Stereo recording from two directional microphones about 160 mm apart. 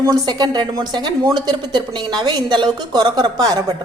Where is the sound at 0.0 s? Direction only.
25° right (ahead or behind).